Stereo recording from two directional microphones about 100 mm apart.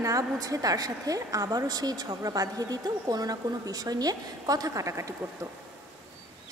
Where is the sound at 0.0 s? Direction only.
35° right (ahead or behind).